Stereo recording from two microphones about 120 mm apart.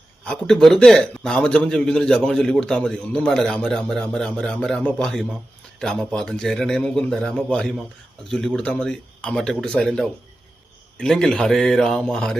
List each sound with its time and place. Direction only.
0.3 s a man's voice: 5° left (ahead or behind)